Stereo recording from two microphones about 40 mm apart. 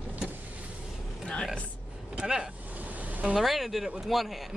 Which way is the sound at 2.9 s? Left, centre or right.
Right.